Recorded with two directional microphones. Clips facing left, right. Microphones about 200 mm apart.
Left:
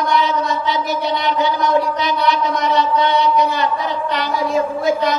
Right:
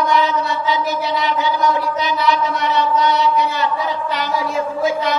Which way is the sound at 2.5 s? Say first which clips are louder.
Left 2 dB; 40° left (ahead or behind).